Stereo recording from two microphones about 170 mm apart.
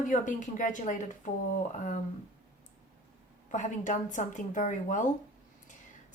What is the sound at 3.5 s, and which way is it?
A woman's voice, 45° left (ahead or behind).